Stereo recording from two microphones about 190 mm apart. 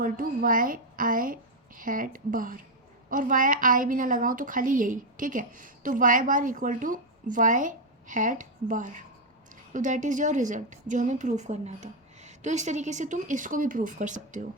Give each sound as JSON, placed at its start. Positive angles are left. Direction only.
{"t": 0.0, "sound": "a woman's voice", "side_deg": -45}